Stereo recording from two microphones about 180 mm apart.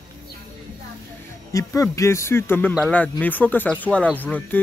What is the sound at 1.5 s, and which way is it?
Speech, 15° left (ahead or behind).